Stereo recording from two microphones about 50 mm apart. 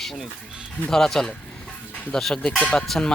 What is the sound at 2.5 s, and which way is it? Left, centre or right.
Speech, left.